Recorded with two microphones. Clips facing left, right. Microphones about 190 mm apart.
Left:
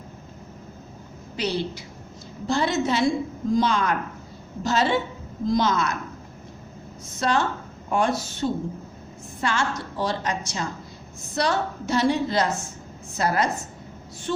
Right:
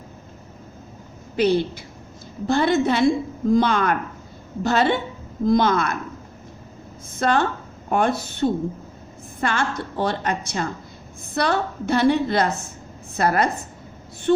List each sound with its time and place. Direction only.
1.4 s a woman's voice: 55° right (ahead or behind)
7.2 s a woman's voice: 55° right (ahead or behind)